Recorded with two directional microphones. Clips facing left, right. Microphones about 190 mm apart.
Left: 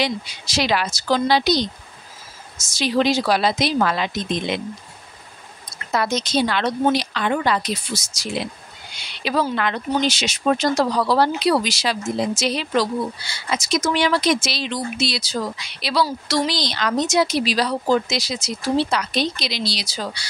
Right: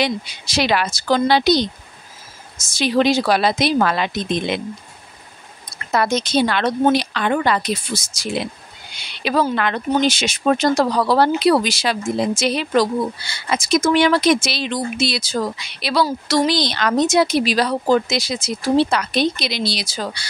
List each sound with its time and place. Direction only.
0.0 s speech: 60° right (ahead or behind)
5.9 s speech: 55° right (ahead or behind)